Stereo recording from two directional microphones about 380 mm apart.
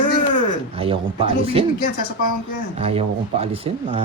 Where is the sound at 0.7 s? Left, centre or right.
Centre.